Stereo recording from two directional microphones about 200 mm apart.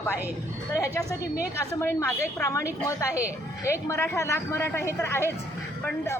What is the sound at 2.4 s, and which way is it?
Speech, 15° left (ahead or behind).